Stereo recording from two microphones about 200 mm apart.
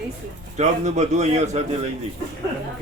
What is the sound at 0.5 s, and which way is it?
A man's voice, 35° right (ahead or behind).